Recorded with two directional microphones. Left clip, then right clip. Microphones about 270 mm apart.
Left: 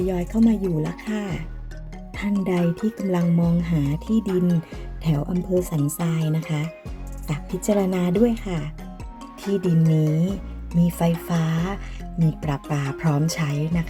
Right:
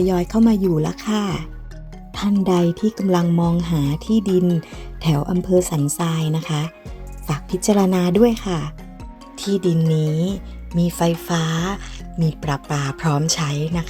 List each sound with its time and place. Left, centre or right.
0.0 s speech: right
10.0 s music: centre
10.8 s speech: centre